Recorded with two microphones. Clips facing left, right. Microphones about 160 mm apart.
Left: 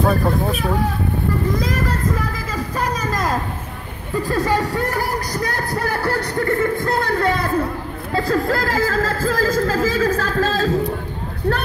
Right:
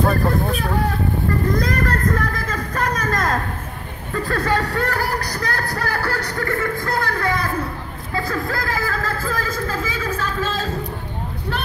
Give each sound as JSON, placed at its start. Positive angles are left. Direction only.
{"t": 0.0, "sound": "speech", "side_deg": 0}
{"t": 1.6, "sound": "a sound", "side_deg": 5}
{"t": 4.1, "sound": "speech", "side_deg": 15}